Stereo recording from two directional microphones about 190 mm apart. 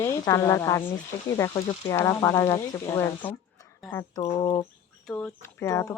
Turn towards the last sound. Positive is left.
turn(degrees=15)  # may be behind; listen again after turning